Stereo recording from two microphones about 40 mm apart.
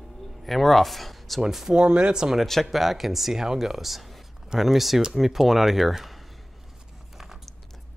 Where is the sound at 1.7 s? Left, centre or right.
Right.